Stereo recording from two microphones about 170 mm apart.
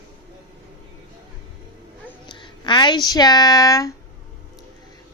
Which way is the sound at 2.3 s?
30° left (ahead or behind).